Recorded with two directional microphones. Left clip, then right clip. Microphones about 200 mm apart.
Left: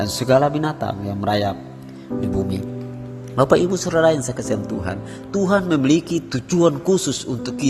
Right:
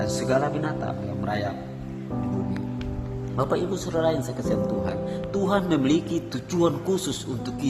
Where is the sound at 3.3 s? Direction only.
35° left (ahead or behind).